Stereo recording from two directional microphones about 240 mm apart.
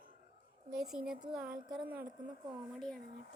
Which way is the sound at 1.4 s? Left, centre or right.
Right.